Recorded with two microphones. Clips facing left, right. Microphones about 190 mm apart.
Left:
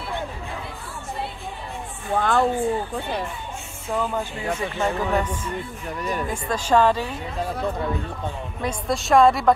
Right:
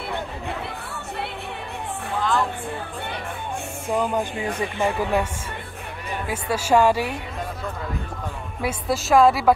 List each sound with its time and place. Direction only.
2.1 s a sound: 55° left (ahead or behind)
3.9 s speech: 15° right (ahead or behind)
6.2 s speech: 10° right (ahead or behind)
8.6 s a woman's voice: 5° right (ahead or behind)